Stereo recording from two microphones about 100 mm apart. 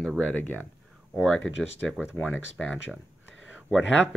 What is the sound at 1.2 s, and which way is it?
Speech, 5° left (ahead or behind).